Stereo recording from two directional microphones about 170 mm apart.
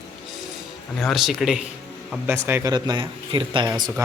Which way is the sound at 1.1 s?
Centre (ahead or behind).